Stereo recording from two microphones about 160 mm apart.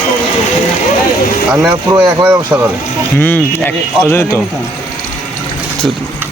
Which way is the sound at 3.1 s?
10° left (ahead or behind).